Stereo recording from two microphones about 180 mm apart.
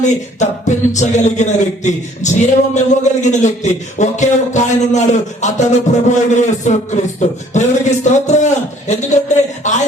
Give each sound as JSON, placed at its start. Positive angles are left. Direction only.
{"t": 0.0, "sound": "a capella", "side_deg": 40}